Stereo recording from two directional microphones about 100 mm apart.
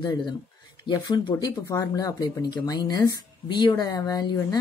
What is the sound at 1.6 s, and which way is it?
Speech, 35° left (ahead or behind).